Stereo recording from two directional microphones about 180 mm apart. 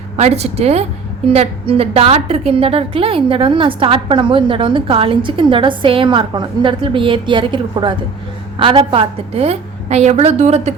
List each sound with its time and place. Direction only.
0.2 s a woman's voice: 35° right (ahead or behind)